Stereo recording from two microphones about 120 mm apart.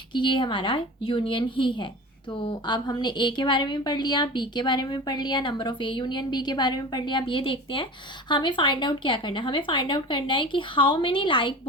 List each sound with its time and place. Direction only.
0.1 s a woman's voice: 40° left (ahead or behind)